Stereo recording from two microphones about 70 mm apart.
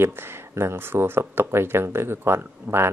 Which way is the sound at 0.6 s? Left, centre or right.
Right.